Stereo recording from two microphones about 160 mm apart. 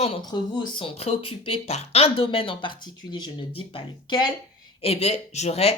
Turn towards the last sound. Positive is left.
turn(degrees=40)  # may be behind; listen again after turning